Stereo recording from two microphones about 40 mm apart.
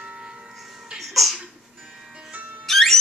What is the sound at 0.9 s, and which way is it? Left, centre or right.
Music, centre.